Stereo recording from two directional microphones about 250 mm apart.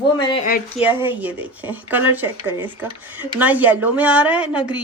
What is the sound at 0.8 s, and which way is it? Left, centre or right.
Speech, centre.